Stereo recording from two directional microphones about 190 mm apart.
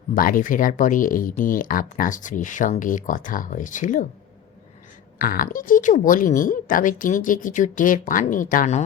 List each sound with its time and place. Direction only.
0.1 s speech: 45° left (ahead or behind)
5.2 s speech: 45° left (ahead or behind)